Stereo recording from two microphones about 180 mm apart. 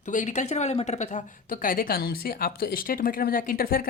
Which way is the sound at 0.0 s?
45° left (ahead or behind).